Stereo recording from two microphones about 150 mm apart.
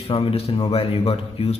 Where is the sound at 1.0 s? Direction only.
40° left (ahead or behind).